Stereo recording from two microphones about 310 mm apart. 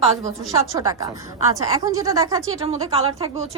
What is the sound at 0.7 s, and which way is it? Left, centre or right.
A woman's voice, centre.